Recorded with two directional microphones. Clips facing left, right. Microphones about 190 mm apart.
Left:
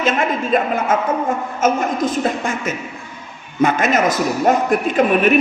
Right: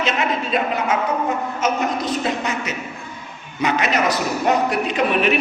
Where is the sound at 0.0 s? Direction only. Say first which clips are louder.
Left 3 dB; 50° left (ahead or behind).